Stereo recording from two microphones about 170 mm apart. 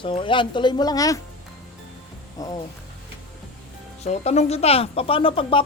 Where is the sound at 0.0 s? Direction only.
30° left (ahead or behind).